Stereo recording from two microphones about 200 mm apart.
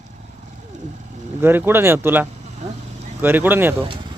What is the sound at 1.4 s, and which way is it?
Speech, 10° right (ahead or behind).